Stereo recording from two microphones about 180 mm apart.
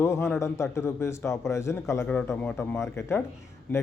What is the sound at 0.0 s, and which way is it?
A man's voice, 15° left (ahead or behind).